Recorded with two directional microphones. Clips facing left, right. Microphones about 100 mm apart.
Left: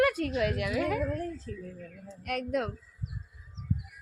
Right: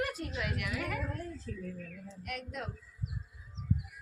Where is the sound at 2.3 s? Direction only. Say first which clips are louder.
Left 11 dB; 60° left (ahead or behind).